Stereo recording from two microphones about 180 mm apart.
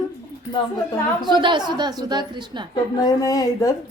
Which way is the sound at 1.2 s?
25° right (ahead or behind).